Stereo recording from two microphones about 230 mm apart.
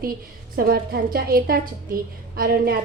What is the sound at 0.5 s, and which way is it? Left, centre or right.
A woman's voice, right.